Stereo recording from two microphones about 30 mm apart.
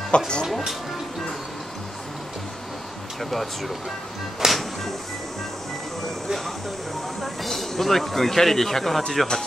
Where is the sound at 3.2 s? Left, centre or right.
Centre.